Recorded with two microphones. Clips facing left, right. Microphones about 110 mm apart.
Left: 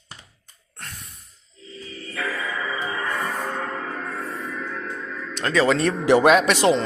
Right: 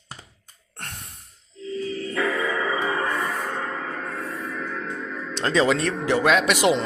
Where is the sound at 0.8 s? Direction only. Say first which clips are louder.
Right 2 dB; 60° right (ahead or behind).